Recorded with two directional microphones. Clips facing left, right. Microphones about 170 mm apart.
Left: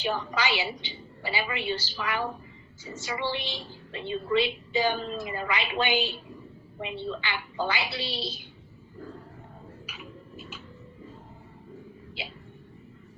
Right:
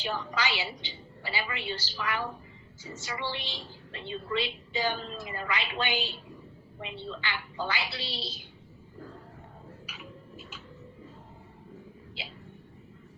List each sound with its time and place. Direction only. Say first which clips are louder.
0.0 s a woman's voice: left 3 dB; 10° left (ahead or behind)
7.2 s a woman's voice: left 3 dB; 15° left (ahead or behind)
9.8 s tick-tock: left 2 dB; 20° left (ahead or behind)